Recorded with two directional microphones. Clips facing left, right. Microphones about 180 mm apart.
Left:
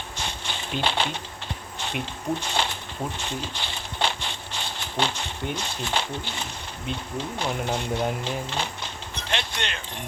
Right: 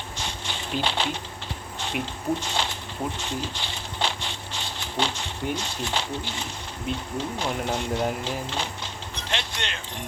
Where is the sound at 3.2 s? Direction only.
55° left (ahead or behind).